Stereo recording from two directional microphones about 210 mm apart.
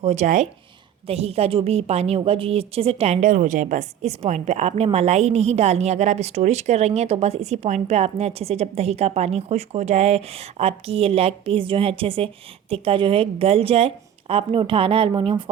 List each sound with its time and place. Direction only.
0.0 s a woman's voice: 35° right (ahead or behind)